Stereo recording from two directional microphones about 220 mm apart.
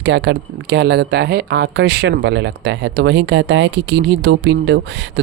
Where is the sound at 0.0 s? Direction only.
55° right (ahead or behind).